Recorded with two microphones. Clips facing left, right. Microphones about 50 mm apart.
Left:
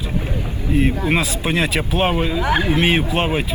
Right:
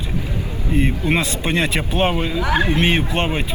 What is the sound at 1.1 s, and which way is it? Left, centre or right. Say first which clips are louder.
Speech: even; centre.